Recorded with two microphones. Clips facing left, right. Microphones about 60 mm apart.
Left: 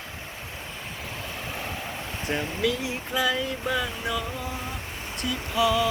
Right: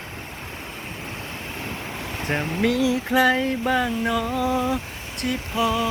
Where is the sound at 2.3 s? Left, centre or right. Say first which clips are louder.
Right 4 dB; right.